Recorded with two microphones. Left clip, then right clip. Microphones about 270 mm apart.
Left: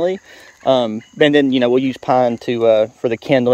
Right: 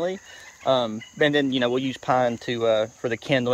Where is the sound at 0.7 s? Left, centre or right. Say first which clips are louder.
Left 7 dB; left.